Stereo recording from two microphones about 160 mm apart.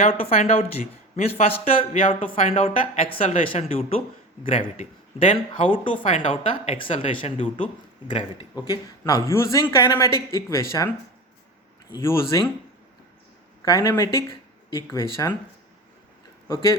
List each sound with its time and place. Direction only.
0.0 s speech: 40° left (ahead or behind); by 10.8 s 20° left (ahead or behind)
11.9 s speech: 15° left (ahead or behind)
13.7 s speech: 20° left (ahead or behind)
16.5 s speech: 20° left (ahead or behind)